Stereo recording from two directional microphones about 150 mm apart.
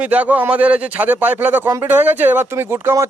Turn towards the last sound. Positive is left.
turn(degrees=-15)  # may be behind; listen again after turning